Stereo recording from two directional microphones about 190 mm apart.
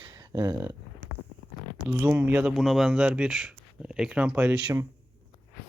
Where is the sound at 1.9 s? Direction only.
10° right (ahead or behind).